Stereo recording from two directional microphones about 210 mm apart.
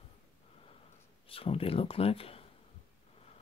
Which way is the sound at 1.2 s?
25° left (ahead or behind).